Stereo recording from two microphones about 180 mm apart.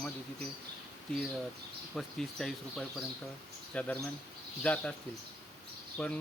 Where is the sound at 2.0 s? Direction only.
Centre (ahead or behind).